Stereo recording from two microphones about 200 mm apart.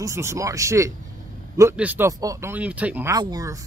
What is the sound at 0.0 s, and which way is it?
Speech, 15° right (ahead or behind).